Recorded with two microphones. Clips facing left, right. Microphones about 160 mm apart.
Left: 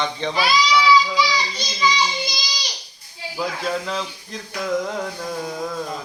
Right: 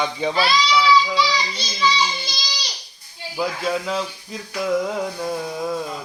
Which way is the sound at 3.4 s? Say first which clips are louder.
Right 2 dB; 5° right (ahead or behind).